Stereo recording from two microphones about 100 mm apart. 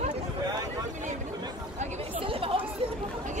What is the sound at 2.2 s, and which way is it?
Chatter, 65° right (ahead or behind).